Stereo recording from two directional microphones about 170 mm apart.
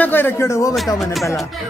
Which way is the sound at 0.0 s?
10° left (ahead or behind).